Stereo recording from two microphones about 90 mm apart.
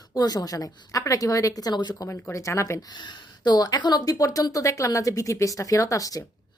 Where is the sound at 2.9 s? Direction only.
55° left (ahead or behind).